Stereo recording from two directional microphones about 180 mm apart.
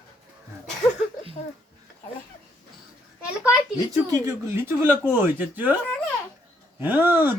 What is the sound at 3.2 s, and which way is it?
Speech, 5° right (ahead or behind).